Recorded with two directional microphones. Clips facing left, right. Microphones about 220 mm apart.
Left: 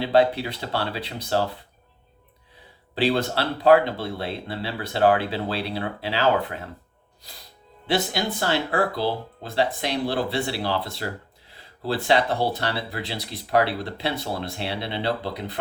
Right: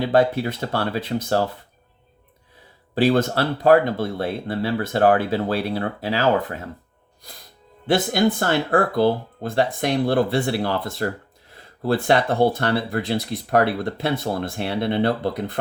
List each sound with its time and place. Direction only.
0.1 s speech: 45° right (ahead or behind)
2.9 s speech: 45° right (ahead or behind)
7.9 s speech: 50° right (ahead or behind)